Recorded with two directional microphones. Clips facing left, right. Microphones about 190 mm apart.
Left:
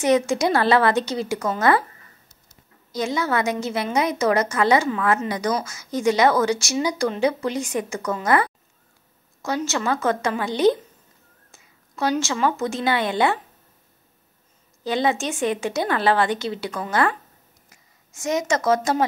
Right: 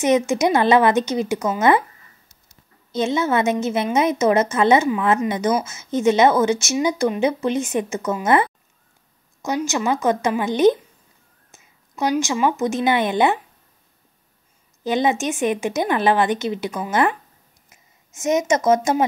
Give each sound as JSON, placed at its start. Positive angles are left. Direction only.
{"t": 0.0, "sound": "a woman's voice", "side_deg": -20}
{"t": 2.9, "sound": "a woman's voice", "side_deg": -25}
{"t": 14.8, "sound": "a woman's voice", "side_deg": -20}
{"t": 17.6, "sound": "a sound", "side_deg": -20}
{"t": 18.8, "sound": "a woman's voice", "side_deg": -20}